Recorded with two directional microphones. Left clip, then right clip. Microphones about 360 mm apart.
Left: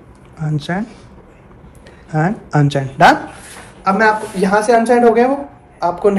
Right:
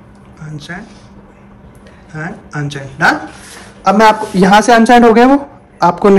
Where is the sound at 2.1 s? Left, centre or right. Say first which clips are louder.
Left 7 dB; centre.